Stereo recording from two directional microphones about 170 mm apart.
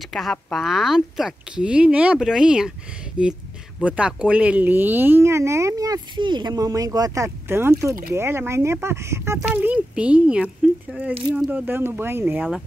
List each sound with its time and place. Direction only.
0.0 s speech: centre (ahead or behind)